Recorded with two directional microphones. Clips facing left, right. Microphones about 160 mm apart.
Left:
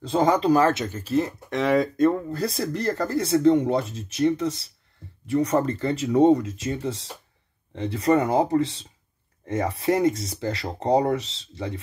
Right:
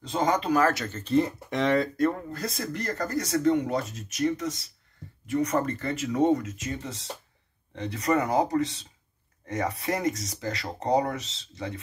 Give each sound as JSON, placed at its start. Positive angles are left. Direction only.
{"t": 0.0, "sound": "speech", "side_deg": 30}
{"t": 0.8, "sound": "speech", "side_deg": 10}
{"t": 1.8, "sound": "speech", "side_deg": 25}